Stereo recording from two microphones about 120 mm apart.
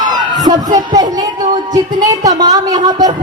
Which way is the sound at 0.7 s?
35° right (ahead or behind).